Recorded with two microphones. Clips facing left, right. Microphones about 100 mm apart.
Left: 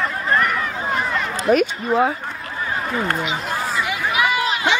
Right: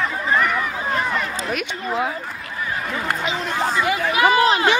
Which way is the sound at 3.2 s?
35° right (ahead or behind).